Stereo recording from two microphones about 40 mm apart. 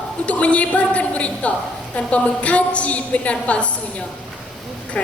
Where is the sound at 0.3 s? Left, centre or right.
Left.